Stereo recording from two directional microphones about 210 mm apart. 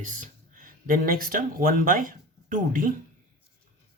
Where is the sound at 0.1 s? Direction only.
40° right (ahead or behind).